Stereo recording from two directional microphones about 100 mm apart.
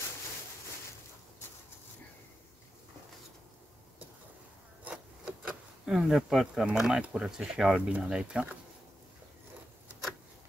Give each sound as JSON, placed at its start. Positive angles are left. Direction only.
{"t": 4.8, "sound": "speech", "side_deg": -10}